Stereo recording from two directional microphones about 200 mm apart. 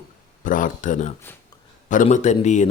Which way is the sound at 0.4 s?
40° left (ahead or behind).